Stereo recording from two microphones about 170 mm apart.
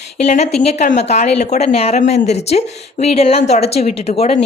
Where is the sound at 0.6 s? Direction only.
40° left (ahead or behind).